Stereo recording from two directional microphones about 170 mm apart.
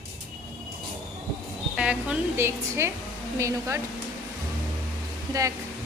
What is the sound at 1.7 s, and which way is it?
A woman's voice, 5° right (ahead or behind).